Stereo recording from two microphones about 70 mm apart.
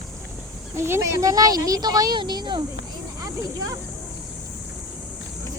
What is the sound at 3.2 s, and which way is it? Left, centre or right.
Speech, right.